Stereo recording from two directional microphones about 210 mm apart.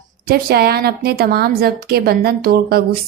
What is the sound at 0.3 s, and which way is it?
A woman's voice, 45° right (ahead or behind).